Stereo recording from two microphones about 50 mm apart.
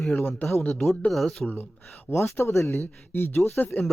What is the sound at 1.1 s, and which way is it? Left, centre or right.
Speech, centre.